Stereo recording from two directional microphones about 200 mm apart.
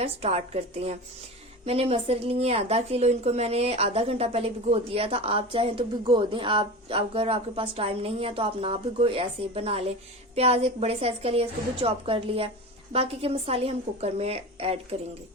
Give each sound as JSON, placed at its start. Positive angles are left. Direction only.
{"t": 0.0, "sound": "a woman's voice", "side_deg": -30}